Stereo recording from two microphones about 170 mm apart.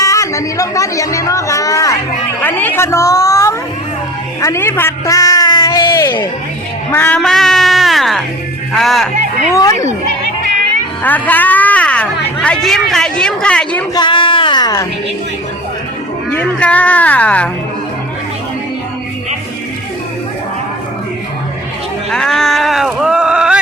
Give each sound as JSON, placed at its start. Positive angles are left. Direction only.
{"t": 0.0, "sound": "chatter", "side_deg": 20}
{"t": 2.4, "sound": "a sound", "side_deg": 10}
{"t": 6.9, "sound": "speech", "side_deg": 10}
{"t": 9.6, "sound": "speech", "side_deg": 20}
{"t": 11.0, "sound": "speech", "side_deg": 10}
{"t": 13.9, "sound": "a sound", "side_deg": 30}
{"t": 16.3, "sound": "speech", "side_deg": 10}
{"t": 22.1, "sound": "speech", "side_deg": 5}